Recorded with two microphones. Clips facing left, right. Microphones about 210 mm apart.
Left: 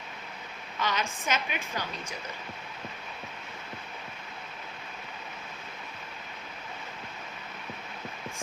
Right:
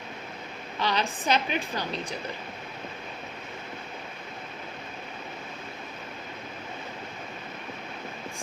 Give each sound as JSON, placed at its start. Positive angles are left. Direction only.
{"t": 0.8, "sound": "a woman's voice", "side_deg": -35}